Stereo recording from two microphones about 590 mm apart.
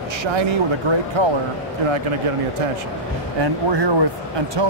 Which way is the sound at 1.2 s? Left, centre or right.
Right.